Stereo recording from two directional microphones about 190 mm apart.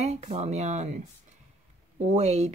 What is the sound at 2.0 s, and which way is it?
Speech, 35° right (ahead or behind).